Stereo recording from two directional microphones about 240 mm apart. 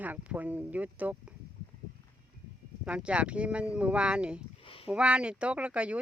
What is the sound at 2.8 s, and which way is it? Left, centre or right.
Speech, centre.